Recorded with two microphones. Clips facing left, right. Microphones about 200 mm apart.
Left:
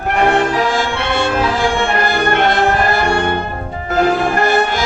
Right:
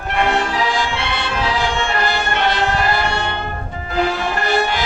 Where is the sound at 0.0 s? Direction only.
50° left (ahead or behind).